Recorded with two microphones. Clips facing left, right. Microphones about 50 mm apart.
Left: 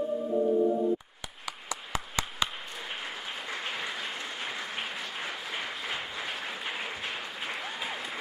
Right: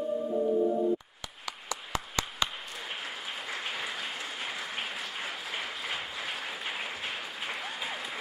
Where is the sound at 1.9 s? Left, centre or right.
Centre.